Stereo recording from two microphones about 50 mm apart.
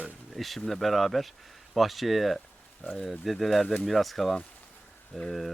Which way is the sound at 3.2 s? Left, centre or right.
Centre.